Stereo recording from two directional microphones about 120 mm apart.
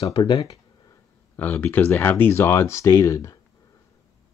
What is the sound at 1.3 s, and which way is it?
Speech, 15° left (ahead or behind).